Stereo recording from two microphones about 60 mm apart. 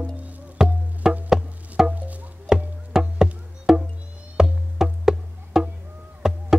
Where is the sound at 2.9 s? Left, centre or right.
Centre.